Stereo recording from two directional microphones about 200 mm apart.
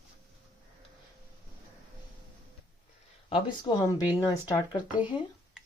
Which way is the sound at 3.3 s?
20° left (ahead or behind).